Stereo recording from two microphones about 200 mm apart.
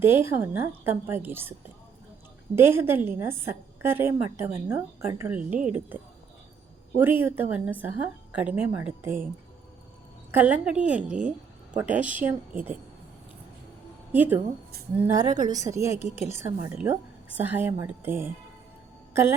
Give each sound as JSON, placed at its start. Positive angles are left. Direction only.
{"t": 0.0, "sound": "a woman's voice", "side_deg": -10}
{"t": 2.6, "sound": "a woman's voice", "side_deg": -10}
{"t": 7.0, "sound": "a woman's voice", "side_deg": -10}
{"t": 10.3, "sound": "a woman's voice", "side_deg": -5}
{"t": 14.1, "sound": "a woman's voice", "side_deg": -10}
{"t": 16.0, "sound": "speech", "side_deg": 30}
{"t": 16.4, "sound": "a woman's voice", "side_deg": -15}